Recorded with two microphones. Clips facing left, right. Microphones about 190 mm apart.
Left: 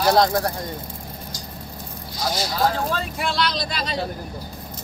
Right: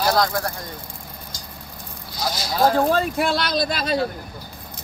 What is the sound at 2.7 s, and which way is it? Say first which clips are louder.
Speech: right 7 dB; 45° right (ahead or behind).